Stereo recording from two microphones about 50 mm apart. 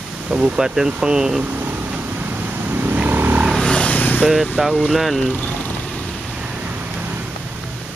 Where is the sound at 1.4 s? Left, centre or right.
Right.